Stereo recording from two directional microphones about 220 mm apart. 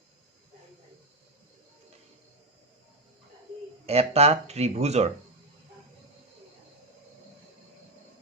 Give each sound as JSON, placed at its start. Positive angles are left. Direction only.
{"t": 3.8, "sound": "speech", "side_deg": -30}